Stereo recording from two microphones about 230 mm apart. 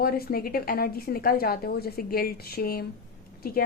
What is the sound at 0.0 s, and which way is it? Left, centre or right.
A woman's voice, left.